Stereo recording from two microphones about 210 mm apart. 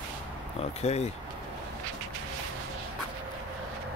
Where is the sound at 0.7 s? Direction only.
30° left (ahead or behind).